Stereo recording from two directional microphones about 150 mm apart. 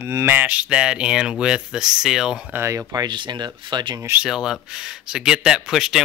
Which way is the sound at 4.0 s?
15° right (ahead or behind).